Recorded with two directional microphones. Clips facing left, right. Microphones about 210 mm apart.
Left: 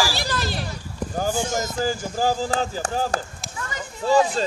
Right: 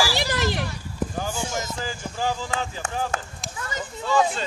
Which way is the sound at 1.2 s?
40° left (ahead or behind).